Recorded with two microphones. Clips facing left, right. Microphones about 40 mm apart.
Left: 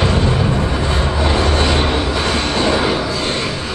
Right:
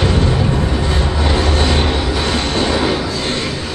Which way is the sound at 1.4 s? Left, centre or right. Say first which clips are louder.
Left 1 dB; left.